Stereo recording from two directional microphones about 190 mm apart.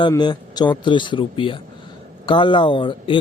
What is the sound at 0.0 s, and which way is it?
Speech, 20° left (ahead or behind).